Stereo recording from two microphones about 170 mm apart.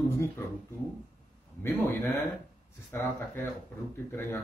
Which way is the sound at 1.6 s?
15° left (ahead or behind).